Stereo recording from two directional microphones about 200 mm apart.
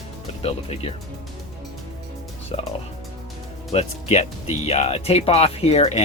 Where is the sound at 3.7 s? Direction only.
35° left (ahead or behind).